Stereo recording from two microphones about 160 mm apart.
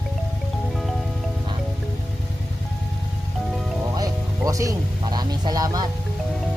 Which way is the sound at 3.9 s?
20° right (ahead or behind).